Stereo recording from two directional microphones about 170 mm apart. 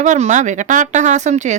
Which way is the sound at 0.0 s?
45° right (ahead or behind).